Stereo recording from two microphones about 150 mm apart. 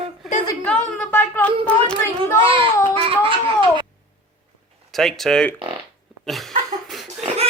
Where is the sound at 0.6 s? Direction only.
10° left (ahead or behind).